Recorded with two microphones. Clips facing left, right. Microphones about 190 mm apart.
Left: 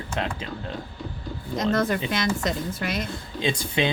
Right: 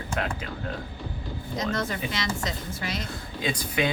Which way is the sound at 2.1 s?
55° left (ahead or behind).